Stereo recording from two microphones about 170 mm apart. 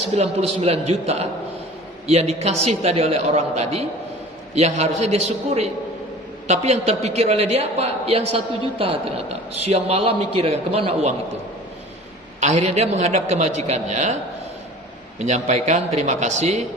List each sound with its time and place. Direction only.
0.1 s a man's voice: 40° right (ahead or behind)
12.4 s a man's voice: 40° right (ahead or behind)
15.2 s a man's voice: 40° right (ahead or behind)